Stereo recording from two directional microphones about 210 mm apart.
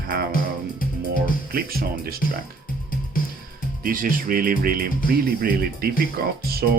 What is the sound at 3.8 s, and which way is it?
Speech, 40° right (ahead or behind).